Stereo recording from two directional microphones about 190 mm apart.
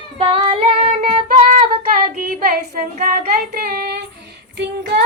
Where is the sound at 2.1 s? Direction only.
50° right (ahead or behind).